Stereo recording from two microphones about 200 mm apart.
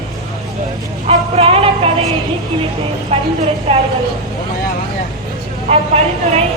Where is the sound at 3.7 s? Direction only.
30° right (ahead or behind).